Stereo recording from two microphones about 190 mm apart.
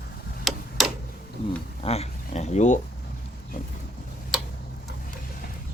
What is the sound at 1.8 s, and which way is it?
Dog, 35° left (ahead or behind).